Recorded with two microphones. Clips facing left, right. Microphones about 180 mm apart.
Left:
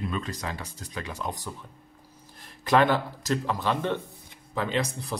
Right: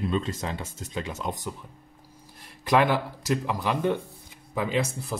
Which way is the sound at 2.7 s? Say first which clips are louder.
Even; 5° right (ahead or behind).